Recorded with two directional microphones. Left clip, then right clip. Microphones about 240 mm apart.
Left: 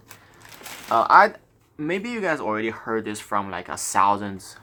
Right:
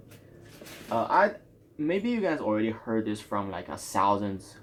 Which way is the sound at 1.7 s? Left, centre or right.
Centre.